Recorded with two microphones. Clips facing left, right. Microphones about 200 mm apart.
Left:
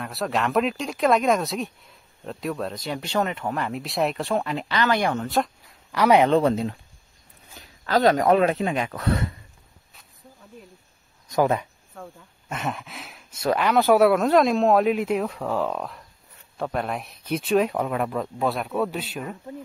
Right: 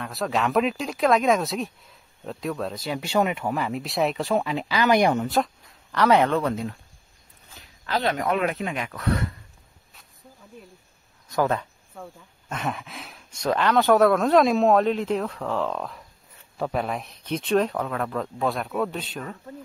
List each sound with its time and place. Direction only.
0.0 s speech: centre (ahead or behind); by 5.2 s 15° right (ahead or behind)
5.2 s a sound: centre (ahead or behind)
5.9 s speech: 15° left (ahead or behind)
6.3 s speech: 25° left (ahead or behind)
7.8 s speech: 45° left (ahead or behind); by 9.3 s 25° left (ahead or behind)
11.2 s speech: 15° left (ahead or behind)
11.9 s speech: centre (ahead or behind)